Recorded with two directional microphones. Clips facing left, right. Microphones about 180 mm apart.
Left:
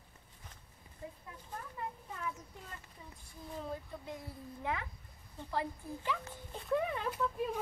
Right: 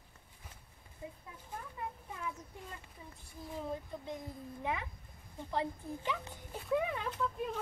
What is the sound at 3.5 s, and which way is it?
A woman's voice, 15° right (ahead or behind).